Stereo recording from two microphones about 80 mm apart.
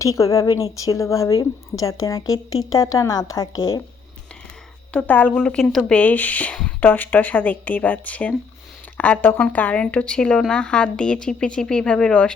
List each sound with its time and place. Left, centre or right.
0.0 s a woman's voice: left
4.9 s a woman's voice: left